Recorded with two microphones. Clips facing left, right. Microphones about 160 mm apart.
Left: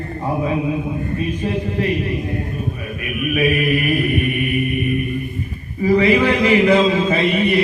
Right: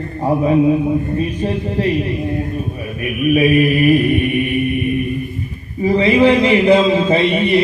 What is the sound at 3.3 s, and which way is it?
Mantra, 30° right (ahead or behind).